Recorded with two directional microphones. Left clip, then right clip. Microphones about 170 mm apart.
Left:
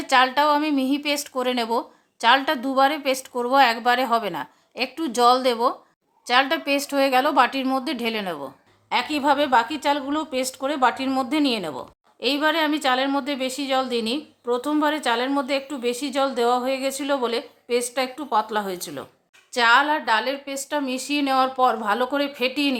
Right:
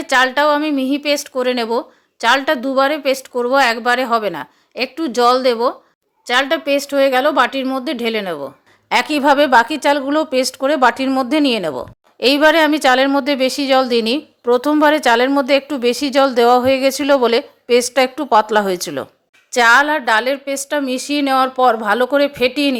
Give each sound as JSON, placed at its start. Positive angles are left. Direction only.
{"t": 0.0, "sound": "a woman's voice", "side_deg": -20}
{"t": 8.9, "sound": "a woman's voice", "side_deg": -35}